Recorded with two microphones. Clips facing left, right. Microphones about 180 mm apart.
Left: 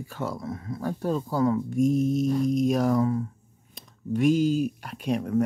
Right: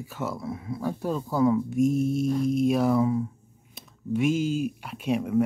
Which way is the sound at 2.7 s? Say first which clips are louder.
Right 1 dB; 10° right (ahead or behind).